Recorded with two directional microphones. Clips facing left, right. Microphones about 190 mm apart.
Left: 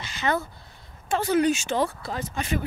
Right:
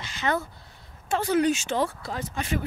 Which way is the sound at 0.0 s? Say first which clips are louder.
Left 1 dB; 10° left (ahead or behind).